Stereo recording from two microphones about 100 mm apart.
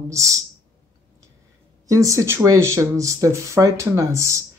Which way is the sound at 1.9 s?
35° right (ahead or behind).